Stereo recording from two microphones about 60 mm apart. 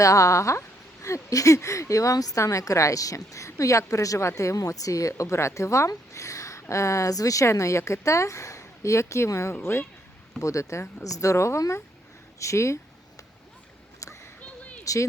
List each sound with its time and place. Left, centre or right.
0.0 s a woman's voice: left
2.4 s a woman's voice: left
9.6 s speech: left
10.4 s a woman's voice: left
14.0 s a sound: left
14.4 s a sound: left